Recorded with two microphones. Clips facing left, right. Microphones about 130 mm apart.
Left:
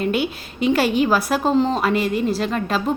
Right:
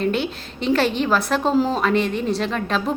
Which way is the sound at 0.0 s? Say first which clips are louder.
Left 1 dB; 10° left (ahead or behind).